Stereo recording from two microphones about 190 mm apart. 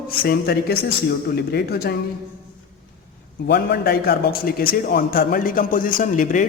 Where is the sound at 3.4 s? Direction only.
60° left (ahead or behind).